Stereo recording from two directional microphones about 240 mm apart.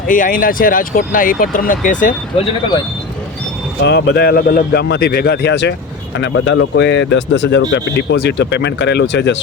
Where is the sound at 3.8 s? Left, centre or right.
Left.